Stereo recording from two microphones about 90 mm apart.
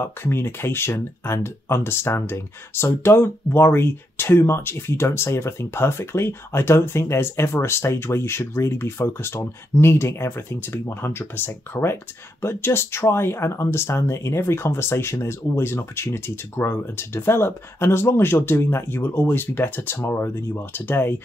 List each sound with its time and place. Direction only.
0.0 s speech: 25° left (ahead or behind)